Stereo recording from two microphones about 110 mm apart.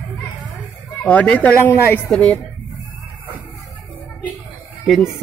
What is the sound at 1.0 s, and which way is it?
Speech, 15° left (ahead or behind).